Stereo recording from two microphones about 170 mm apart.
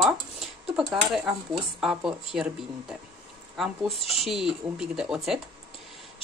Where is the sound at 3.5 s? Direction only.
Centre (ahead or behind).